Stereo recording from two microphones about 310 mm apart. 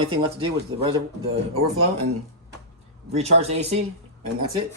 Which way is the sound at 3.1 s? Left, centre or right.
Right.